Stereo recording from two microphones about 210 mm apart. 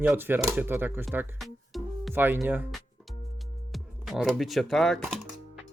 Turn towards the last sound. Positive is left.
turn(degrees=0)  # may be behind; listen again after turning